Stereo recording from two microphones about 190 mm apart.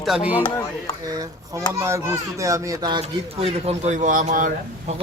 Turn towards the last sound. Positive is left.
turn(degrees=-45)  # may be behind; listen again after turning